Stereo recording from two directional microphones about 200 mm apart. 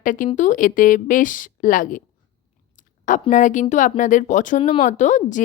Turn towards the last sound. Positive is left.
turn(degrees=35)  # may be behind; listen again after turning